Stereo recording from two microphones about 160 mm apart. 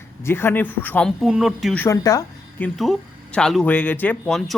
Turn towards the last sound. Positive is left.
turn(degrees=10)  # may be behind; listen again after turning